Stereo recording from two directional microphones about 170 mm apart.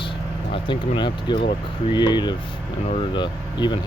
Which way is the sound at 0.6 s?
25° left (ahead or behind).